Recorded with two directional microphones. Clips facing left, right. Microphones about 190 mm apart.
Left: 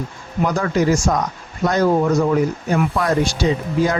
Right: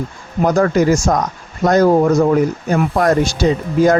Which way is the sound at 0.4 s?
45° right (ahead or behind).